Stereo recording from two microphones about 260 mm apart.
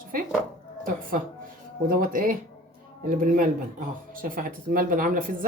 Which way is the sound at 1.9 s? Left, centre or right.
Right.